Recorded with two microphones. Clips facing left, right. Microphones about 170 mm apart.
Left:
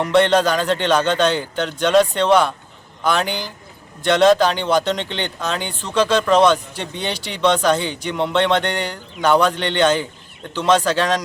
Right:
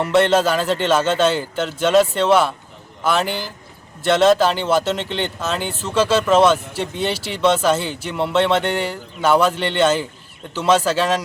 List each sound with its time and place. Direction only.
0.0 s speech: 5° right (ahead or behind)